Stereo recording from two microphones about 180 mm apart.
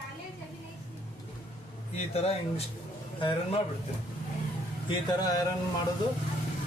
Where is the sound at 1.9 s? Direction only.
35° left (ahead or behind).